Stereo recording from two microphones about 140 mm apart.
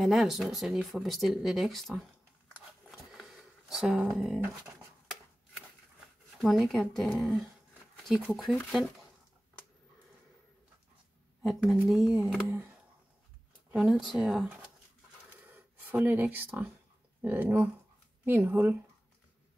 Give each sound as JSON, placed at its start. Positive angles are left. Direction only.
{"t": 0.0, "sound": "speech", "side_deg": 0}
{"t": 3.2, "sound": "a sound", "side_deg": -5}
{"t": 6.4, "sound": "speech", "side_deg": 0}
{"t": 11.4, "sound": "speech", "side_deg": -5}
{"t": 13.7, "sound": "speech", "side_deg": -5}
{"t": 15.4, "sound": "a sound", "side_deg": -10}
{"t": 17.2, "sound": "speech", "side_deg": -15}